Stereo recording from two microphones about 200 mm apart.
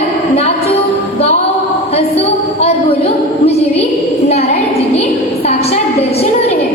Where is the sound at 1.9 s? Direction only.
30° left (ahead or behind).